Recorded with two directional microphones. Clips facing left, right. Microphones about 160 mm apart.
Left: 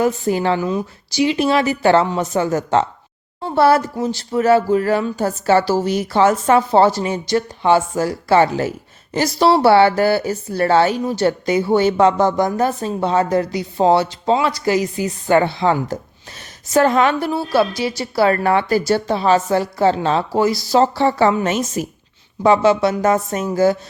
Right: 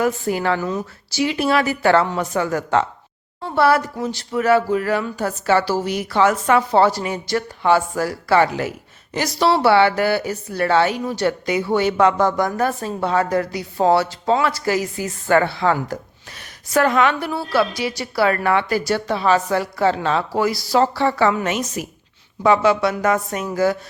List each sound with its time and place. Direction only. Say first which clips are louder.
0.0 s a woman's voice: left 3 dB; 25° left (ahead or behind)